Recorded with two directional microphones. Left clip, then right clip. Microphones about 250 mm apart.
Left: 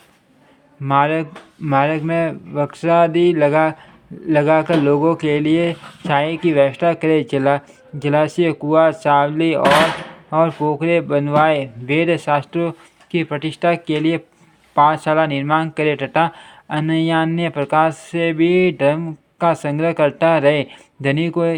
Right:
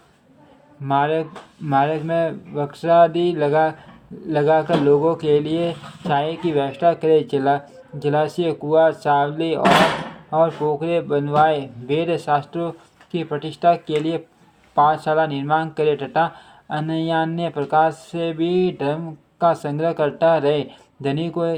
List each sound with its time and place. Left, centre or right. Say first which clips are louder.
0.9 s speech: left 3 dB; left